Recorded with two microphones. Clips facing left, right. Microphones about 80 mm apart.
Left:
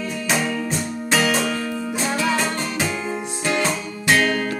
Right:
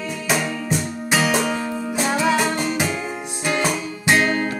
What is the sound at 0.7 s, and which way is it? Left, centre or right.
Music, centre.